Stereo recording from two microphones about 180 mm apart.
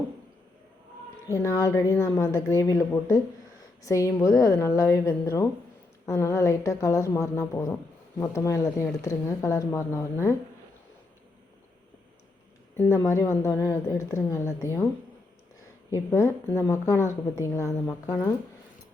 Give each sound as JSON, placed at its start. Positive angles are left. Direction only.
{"t": 1.3, "sound": "a woman's voice", "side_deg": 15}
{"t": 12.7, "sound": "a woman's voice", "side_deg": 15}
{"t": 15.9, "sound": "a woman's voice", "side_deg": 15}